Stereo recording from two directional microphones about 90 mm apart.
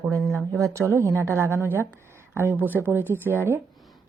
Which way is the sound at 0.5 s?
35° right (ahead or behind).